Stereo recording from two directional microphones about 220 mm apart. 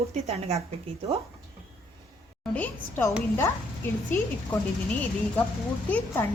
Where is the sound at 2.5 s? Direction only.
10° left (ahead or behind).